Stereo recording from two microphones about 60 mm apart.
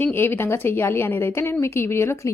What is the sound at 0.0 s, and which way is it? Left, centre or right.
A woman's voice, left.